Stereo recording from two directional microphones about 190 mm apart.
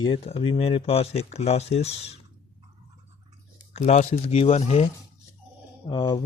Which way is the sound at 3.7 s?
40° left (ahead or behind).